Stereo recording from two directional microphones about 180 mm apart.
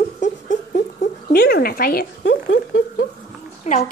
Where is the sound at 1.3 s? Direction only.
60° left (ahead or behind).